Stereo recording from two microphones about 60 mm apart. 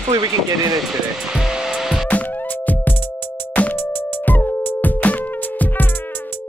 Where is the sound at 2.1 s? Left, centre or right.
Left.